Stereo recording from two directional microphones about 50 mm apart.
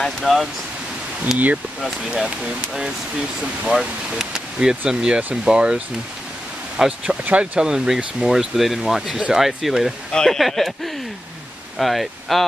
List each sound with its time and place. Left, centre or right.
0.2 s speech: centre
6.8 s speech: centre
7.2 s speech: right
7.6 s speech: centre
10.1 s speech: centre
11.8 s speech: centre